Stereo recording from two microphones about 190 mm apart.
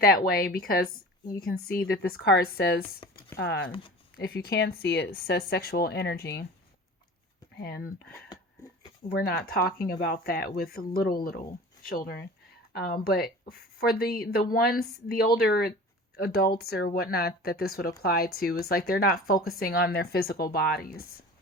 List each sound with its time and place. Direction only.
0.0 s speech: 50° left (ahead or behind)
3.0 s a sound: 25° left (ahead or behind)
3.3 s speech: 75° left (ahead or behind)
3.7 s speech: 30° left (ahead or behind)
4.2 s speech: 55° left (ahead or behind)
7.5 s speech: 55° left (ahead or behind)
9.0 s speech: 55° left (ahead or behind)